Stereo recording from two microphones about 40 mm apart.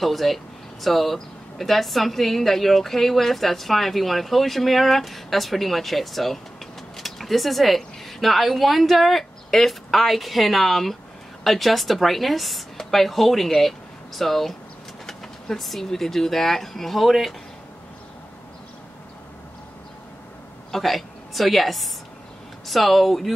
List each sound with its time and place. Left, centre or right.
0.0 s a woman's voice: centre
20.7 s a woman's voice: centre